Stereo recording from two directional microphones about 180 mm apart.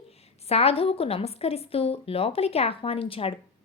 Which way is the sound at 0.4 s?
35° left (ahead or behind).